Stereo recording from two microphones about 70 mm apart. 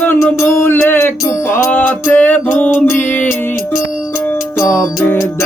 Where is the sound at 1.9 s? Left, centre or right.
Left.